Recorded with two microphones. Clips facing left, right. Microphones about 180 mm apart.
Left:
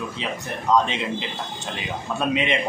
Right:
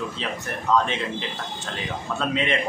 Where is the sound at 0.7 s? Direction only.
15° left (ahead or behind).